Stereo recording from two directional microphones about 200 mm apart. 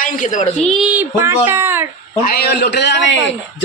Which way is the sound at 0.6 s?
Centre (ahead or behind).